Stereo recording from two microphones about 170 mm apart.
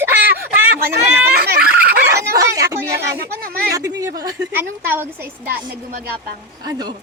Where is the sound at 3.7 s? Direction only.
20° right (ahead or behind).